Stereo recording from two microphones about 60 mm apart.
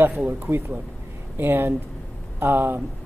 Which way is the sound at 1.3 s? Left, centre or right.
Right.